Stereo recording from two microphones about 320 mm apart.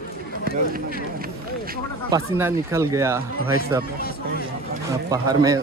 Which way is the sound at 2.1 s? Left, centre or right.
Centre.